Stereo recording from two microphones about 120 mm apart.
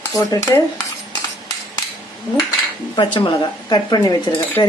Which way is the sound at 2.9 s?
40° left (ahead or behind).